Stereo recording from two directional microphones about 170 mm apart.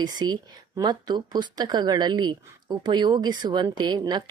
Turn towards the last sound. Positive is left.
turn(degrees=-25)  # may be behind; listen again after turning